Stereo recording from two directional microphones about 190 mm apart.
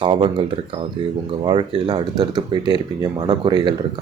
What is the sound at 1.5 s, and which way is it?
Speech, 25° right (ahead or behind).